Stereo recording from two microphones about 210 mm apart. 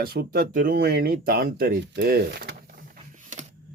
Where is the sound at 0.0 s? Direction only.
45° right (ahead or behind).